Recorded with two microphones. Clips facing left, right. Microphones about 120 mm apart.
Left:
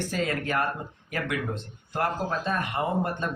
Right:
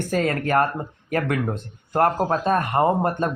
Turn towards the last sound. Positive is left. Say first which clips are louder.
# right 7 dB
turn(degrees=-50)  # may be behind; listen again after turning